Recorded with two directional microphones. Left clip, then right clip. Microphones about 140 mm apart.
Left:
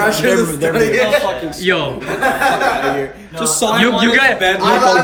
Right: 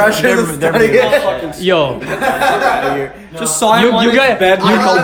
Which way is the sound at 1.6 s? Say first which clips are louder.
Right 4 dB; 15° right (ahead or behind).